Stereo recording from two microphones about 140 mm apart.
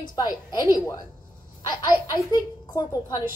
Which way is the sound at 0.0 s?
30° left (ahead or behind).